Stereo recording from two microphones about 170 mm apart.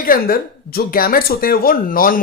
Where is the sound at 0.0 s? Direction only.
60° left (ahead or behind).